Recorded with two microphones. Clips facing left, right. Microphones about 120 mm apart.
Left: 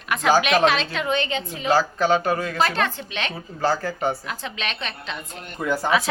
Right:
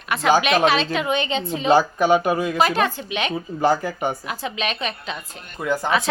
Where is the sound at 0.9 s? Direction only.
15° right (ahead or behind).